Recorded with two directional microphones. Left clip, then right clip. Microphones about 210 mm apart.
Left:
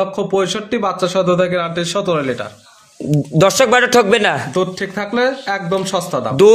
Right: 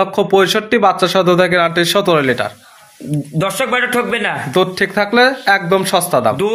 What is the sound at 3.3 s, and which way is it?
Speech, 60° left (ahead or behind).